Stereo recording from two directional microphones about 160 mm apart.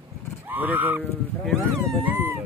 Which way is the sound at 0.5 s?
10° right (ahead or behind).